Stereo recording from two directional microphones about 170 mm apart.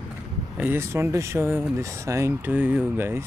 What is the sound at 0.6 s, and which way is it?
Speech, 15° right (ahead or behind).